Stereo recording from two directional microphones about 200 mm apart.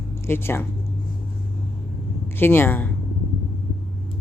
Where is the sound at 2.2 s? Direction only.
10° left (ahead or behind).